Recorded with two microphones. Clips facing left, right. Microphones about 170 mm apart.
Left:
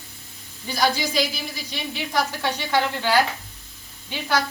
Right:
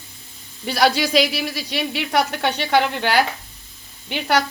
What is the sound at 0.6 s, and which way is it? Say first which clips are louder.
Speech: right 5 dB; 75° right (ahead or behind).